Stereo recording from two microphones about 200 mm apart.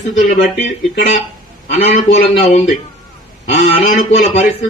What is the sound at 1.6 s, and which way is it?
Speech, 35° left (ahead or behind).